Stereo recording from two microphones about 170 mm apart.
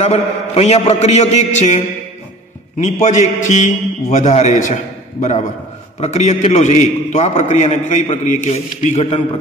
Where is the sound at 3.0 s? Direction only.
45° left (ahead or behind).